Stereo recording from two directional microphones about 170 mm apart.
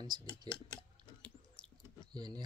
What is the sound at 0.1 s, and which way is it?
Speech, 25° right (ahead or behind).